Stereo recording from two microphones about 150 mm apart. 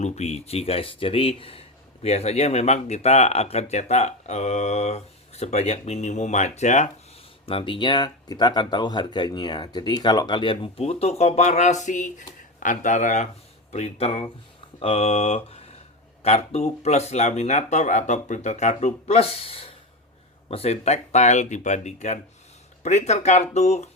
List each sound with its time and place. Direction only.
0.0 s speech: 45° left (ahead or behind)
7.4 s speech: 35° left (ahead or behind)
14.8 s mantra: 40° left (ahead or behind)
16.2 s speech: 45° left (ahead or behind)